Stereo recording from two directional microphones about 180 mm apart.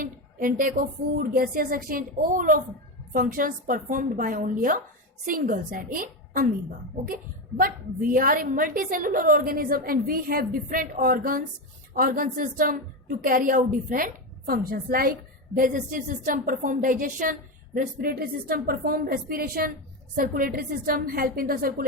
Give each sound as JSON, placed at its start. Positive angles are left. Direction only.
{"t": 0.0, "sound": "a woman's voice", "side_deg": -50}